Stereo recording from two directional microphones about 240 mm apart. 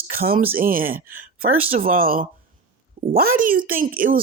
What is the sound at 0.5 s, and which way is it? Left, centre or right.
Speech, right.